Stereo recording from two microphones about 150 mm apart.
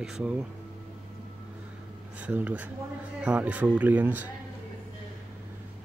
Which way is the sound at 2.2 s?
10° right (ahead or behind).